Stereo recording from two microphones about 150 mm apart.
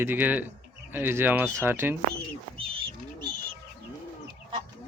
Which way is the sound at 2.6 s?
35° right (ahead or behind).